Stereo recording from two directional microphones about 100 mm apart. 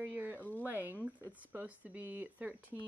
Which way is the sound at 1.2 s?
20° right (ahead or behind).